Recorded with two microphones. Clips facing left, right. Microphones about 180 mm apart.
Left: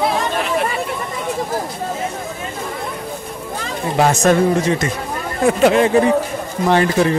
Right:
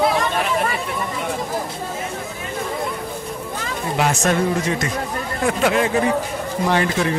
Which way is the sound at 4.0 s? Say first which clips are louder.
Left 6 dB; 40° left (ahead or behind).